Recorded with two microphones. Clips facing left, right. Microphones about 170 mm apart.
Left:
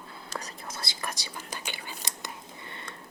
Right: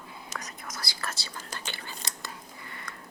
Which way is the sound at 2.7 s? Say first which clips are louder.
Left 1 dB; 25° left (ahead or behind).